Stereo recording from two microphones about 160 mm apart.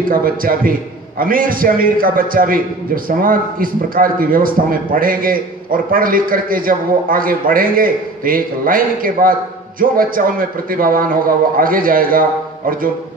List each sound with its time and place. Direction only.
0.1 s a man's voice: 60° right (ahead or behind)